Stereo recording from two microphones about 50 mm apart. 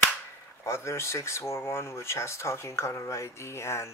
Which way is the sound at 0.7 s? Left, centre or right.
Left.